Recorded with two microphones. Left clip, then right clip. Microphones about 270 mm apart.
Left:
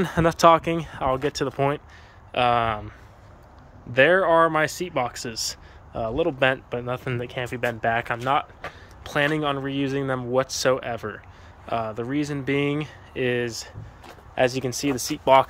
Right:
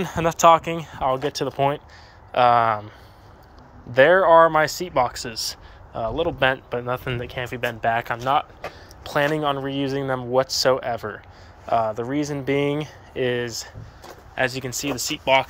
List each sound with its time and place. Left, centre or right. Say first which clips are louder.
0.0 s a man's voice: right 1 dB; centre
3.9 s a man's voice: right 4 dB; centre